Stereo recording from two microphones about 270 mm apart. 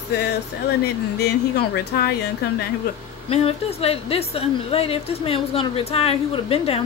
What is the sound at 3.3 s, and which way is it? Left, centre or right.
Speech, left.